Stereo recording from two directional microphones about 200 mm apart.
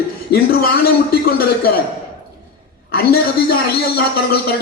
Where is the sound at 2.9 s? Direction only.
50° left (ahead or behind).